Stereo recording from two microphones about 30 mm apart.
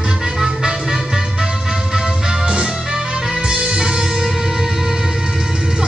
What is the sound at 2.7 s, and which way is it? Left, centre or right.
Music, centre.